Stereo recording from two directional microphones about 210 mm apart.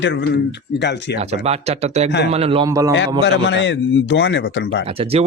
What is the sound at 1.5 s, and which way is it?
Speech, 30° right (ahead or behind).